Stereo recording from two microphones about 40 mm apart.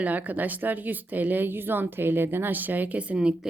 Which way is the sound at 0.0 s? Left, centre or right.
Right.